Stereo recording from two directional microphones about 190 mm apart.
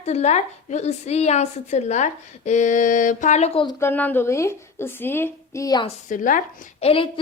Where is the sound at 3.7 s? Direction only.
10° left (ahead or behind).